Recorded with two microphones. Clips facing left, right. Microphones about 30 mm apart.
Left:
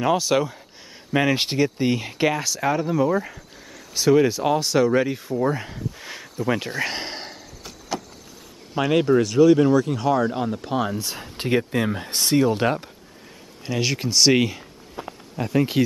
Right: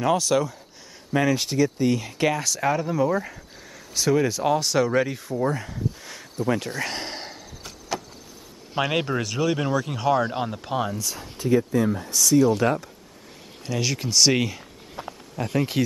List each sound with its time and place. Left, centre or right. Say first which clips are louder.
0.0 s speech: left 1 dB; centre
2.2 s speech: left 1 dB; centre
3.9 s speech: left 4 dB; centre
5.6 s a sound: right 1 dB; left; by 8.0 s centre
8.7 s speech: left 6 dB; centre
10.6 s speech: left 1 dB; centre
11.0 s speech: left 1 dB; left
11.3 s speech: right 1 dB; left
13.7 s speech: left 2 dB; centre